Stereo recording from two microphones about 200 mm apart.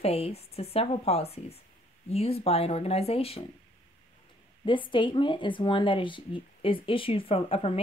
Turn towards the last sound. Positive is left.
turn(degrees=30)  # may be behind; listen again after turning